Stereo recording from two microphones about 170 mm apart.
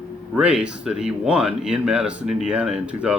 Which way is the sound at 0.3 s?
5° right (ahead or behind).